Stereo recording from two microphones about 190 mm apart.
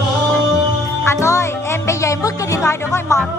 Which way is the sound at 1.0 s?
15° left (ahead or behind).